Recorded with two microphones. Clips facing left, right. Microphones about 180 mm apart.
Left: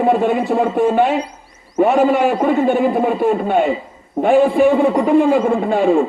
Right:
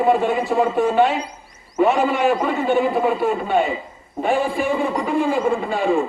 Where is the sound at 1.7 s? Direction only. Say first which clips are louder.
Left 4 dB; 50° left (ahead or behind).